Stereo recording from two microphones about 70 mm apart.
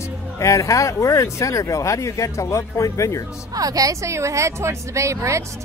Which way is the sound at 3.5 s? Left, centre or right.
Right.